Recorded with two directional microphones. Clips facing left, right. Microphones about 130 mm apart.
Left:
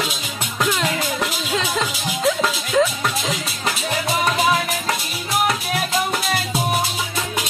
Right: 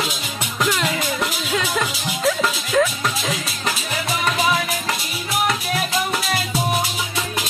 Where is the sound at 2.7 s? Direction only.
15° left (ahead or behind).